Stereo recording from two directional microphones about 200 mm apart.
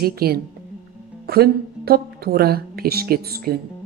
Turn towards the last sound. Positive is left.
turn(degrees=-50)  # may be behind; listen again after turning